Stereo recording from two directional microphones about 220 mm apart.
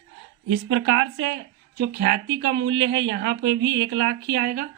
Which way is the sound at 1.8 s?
45° right (ahead or behind).